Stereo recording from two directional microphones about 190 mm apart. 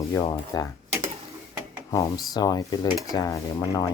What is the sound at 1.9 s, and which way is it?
Speech, 20° left (ahead or behind).